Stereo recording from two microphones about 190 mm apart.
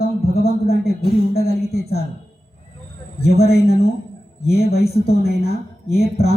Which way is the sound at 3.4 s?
55° left (ahead or behind).